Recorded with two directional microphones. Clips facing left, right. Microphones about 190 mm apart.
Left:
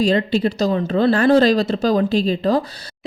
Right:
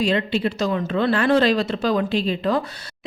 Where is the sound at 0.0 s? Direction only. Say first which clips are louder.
Left 4 dB; 40° left (ahead or behind).